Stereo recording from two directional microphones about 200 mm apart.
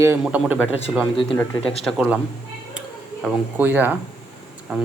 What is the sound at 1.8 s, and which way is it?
Speech, 5° right (ahead or behind).